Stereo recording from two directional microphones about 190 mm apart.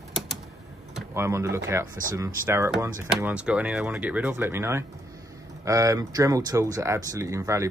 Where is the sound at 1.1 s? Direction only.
15° right (ahead or behind).